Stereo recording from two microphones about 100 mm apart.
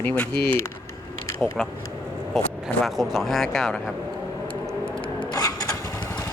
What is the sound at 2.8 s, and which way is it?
Speech, centre (ahead or behind).